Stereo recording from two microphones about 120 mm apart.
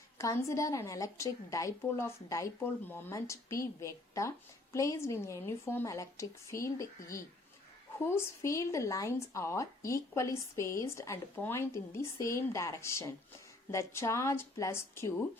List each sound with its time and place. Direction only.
0.2 s a woman's voice: 25° left (ahead or behind)